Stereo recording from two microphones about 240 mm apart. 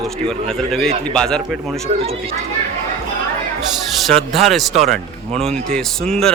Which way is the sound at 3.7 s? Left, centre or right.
Centre.